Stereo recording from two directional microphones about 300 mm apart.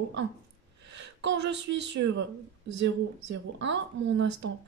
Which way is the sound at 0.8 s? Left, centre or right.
Right.